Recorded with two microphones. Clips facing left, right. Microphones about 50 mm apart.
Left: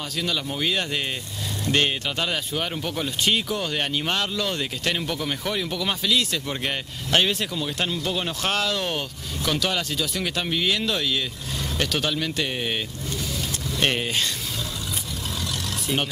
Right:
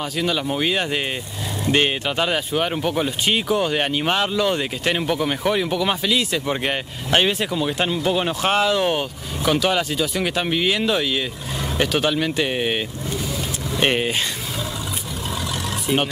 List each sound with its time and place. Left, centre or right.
0.2 s speech: centre
15.9 s speech: centre